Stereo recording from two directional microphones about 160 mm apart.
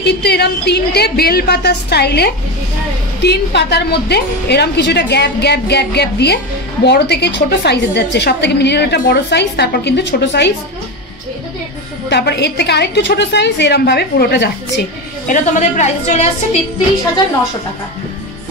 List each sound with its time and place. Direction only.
0.0 s a woman's voice: 90° left
12.1 s a woman's voice: 90° left
15.2 s a woman's voice: 55° left (ahead or behind)